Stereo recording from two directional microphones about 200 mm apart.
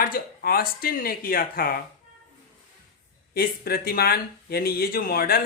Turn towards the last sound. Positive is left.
turn(degrees=50)  # may be behind; listen again after turning